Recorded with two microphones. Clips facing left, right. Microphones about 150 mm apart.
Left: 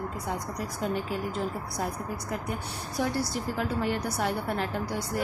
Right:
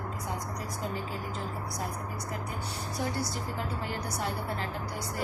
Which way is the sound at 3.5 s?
70° left (ahead or behind).